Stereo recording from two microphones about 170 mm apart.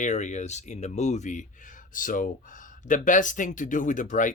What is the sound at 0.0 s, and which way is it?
Speech, 45° left (ahead or behind).